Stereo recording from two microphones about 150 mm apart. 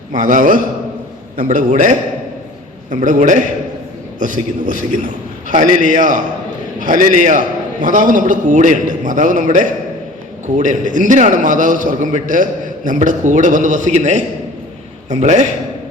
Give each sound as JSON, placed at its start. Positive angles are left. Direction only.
{"t": 0.1, "sound": "a man's voice", "side_deg": -60}